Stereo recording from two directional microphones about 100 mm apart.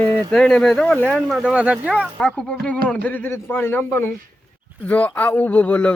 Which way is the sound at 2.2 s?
5° left (ahead or behind).